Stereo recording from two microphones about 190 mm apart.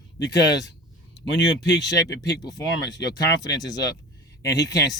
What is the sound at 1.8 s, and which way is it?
Speech, 20° left (ahead or behind).